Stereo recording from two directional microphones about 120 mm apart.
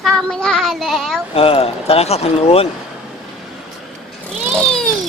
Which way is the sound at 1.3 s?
50° left (ahead or behind).